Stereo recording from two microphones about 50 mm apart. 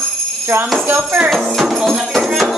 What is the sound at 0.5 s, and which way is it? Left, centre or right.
Jingle bell, right.